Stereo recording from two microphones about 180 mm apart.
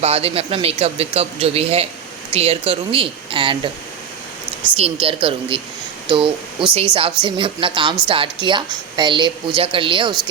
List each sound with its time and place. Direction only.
0.0 s speech: 35° right (ahead or behind)
4.8 s a woman's voice: 30° right (ahead or behind)